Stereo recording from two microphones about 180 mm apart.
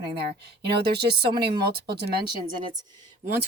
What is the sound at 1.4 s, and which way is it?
Speech, 60° right (ahead or behind).